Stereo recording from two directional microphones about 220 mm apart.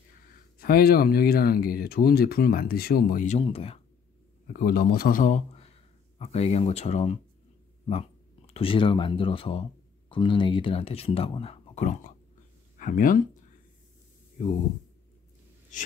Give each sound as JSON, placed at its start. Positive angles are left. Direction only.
{"t": 0.6, "sound": "speech", "side_deg": 45}
{"t": 4.5, "sound": "a man's voice", "side_deg": 40}
{"t": 8.5, "sound": "speech", "side_deg": 25}